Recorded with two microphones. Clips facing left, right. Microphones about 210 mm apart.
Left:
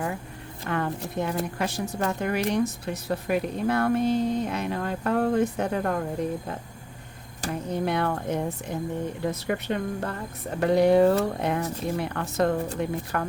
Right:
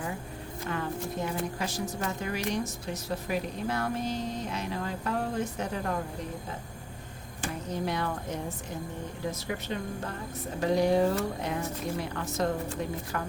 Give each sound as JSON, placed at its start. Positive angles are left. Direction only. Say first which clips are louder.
{"t": 0.7, "sound": "a woman's voice", "louder": "left 5 dB", "side_deg": 65}
{"t": 7.7, "sound": "a woman's voice", "louder": "left 6 dB", "side_deg": 60}